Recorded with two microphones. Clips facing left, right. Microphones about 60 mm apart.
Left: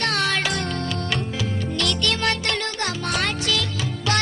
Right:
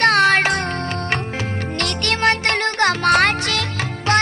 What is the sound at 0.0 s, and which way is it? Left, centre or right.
Music, right.